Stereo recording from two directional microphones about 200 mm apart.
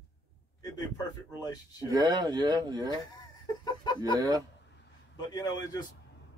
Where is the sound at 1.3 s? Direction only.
20° left (ahead or behind).